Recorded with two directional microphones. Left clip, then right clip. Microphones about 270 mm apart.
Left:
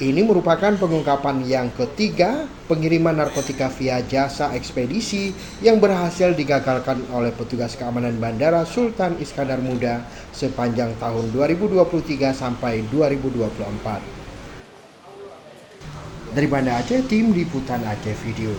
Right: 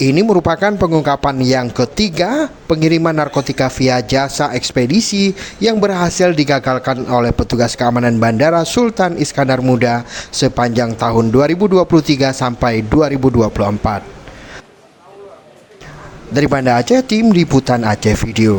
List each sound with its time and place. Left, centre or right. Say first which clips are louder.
0.0 s speech: right 5 dB; right
16.3 s speech: right 8 dB; right